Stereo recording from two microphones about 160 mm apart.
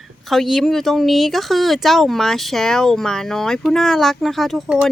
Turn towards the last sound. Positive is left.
turn(degrees=0)  # may be behind; listen again after turning